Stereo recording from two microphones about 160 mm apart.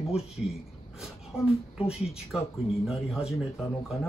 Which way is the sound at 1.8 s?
40° left (ahead or behind).